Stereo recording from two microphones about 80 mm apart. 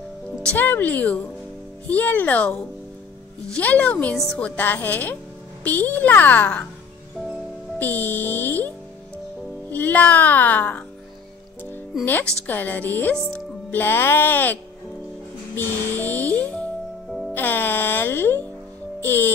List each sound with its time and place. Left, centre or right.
0.4 s a child's voice: left
3.5 s a woman's voice: centre
7.8 s a child's voice: left
12.0 s a child's voice: left
17.3 s music: left
19.0 s a child's voice: left